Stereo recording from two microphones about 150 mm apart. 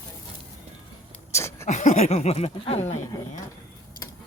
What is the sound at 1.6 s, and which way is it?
Speech, 50° left (ahead or behind).